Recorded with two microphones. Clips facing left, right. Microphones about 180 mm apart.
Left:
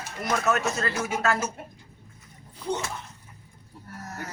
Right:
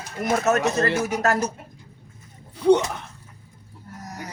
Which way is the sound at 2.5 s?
70° right (ahead or behind).